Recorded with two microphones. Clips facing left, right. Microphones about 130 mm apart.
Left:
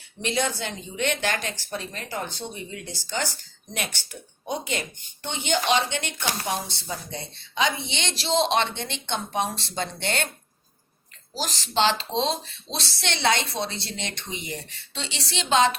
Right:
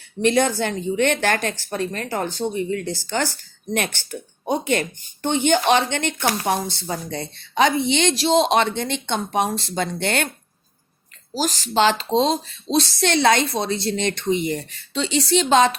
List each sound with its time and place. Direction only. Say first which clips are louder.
0.2 s a woman's voice: right 8 dB; 55° right (ahead or behind)
11.3 s a woman's voice: right 5 dB; 45° right (ahead or behind)